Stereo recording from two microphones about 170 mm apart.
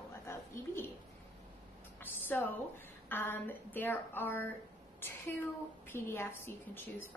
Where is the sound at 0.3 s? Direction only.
15° left (ahead or behind).